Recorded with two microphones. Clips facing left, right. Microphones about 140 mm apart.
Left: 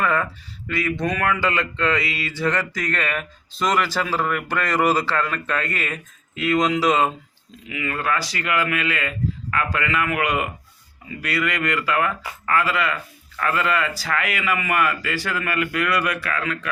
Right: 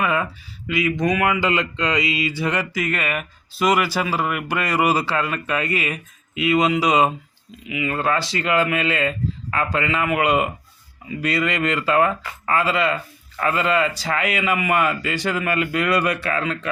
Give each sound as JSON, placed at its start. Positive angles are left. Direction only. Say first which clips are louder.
{"t": 0.0, "sound": "a sound", "louder": "even", "side_deg": -15}
{"t": 0.7, "sound": "mantra", "louder": "right 3 dB", "side_deg": -10}
{"t": 7.7, "sound": "a man's voice", "louder": "right 3 dB", "side_deg": -20}